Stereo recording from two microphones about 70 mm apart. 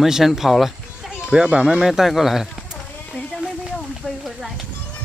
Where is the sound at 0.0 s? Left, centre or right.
Centre.